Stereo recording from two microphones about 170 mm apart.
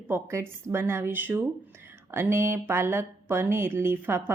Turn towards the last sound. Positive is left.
turn(degrees=-15)  # may be behind; listen again after turning